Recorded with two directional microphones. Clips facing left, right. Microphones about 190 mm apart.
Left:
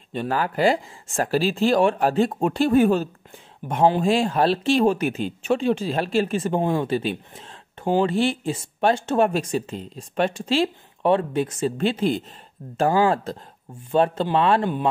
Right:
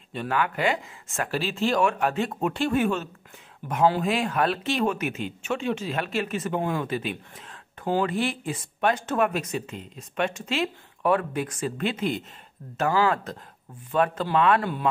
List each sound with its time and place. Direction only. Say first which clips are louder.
0.1 s speech: left 2 dB; 35° left (ahead or behind)
3.6 s speech: left 3 dB; 25° left (ahead or behind)